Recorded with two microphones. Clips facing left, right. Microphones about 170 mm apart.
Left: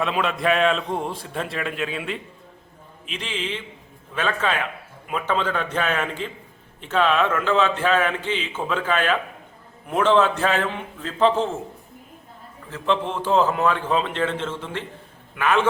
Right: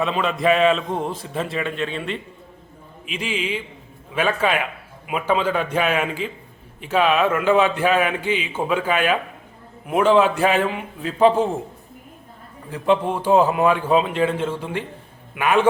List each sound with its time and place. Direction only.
0.0 s a man's voice: centre (ahead or behind)
3.1 s a man's voice: 10° right (ahead or behind)
12.7 s a man's voice: 15° right (ahead or behind)